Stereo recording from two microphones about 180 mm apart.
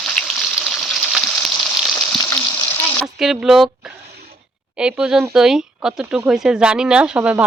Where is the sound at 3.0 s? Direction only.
Centre (ahead or behind).